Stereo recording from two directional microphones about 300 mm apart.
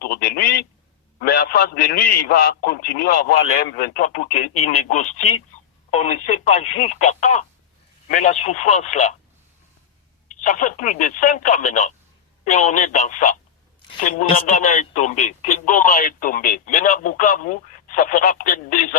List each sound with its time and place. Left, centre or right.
0.0 s a sound: left
1.2 s a man's voice: left
10.2 s speech: left